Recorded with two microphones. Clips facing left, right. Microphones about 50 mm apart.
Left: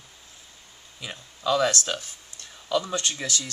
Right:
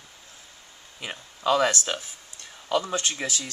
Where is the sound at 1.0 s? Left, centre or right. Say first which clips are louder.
Right 2 dB; right.